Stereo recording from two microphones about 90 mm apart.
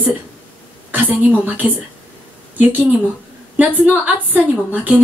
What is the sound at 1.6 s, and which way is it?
Speech, 25° right (ahead or behind).